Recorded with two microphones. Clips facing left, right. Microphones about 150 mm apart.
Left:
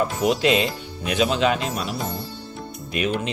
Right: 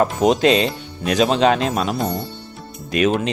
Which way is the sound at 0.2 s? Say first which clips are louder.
Right 3 dB; 35° right (ahead or behind).